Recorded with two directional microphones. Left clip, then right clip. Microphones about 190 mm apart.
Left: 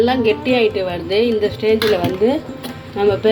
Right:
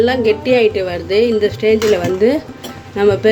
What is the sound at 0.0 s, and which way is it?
Speech, 10° right (ahead or behind).